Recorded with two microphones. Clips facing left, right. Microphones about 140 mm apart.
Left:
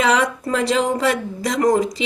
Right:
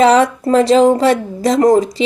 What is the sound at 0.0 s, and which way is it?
Speech, 30° right (ahead or behind).